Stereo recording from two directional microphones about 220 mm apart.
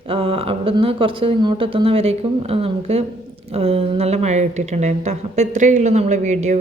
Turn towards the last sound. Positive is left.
turn(degrees=-30)  # may be behind; listen again after turning